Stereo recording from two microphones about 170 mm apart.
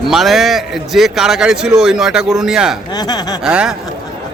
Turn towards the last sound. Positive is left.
turn(degrees=-5)  # may be behind; listen again after turning